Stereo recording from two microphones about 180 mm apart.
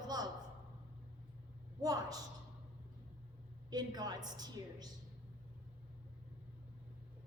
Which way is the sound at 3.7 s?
20° right (ahead or behind).